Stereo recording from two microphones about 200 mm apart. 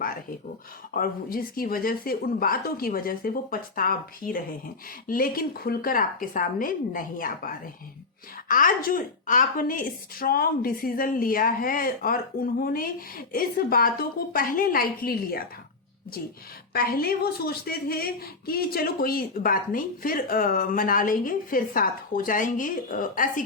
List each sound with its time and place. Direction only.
0.9 s a woman's voice: 45° left (ahead or behind)
16.7 s a woman's voice: 50° left (ahead or behind)